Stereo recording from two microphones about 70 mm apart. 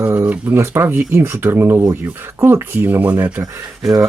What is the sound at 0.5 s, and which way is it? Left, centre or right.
Speech, right.